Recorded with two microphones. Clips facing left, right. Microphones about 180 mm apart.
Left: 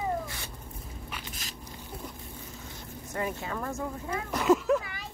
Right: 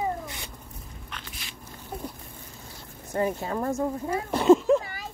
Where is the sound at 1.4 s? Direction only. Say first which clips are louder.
Left 1 dB; 40° left (ahead or behind).